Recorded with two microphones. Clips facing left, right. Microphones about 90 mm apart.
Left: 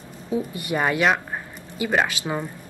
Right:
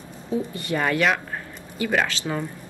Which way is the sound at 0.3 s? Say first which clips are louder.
Even; 15° left (ahead or behind).